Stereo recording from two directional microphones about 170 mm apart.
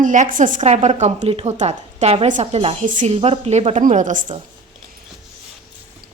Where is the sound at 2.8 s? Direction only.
50° right (ahead or behind).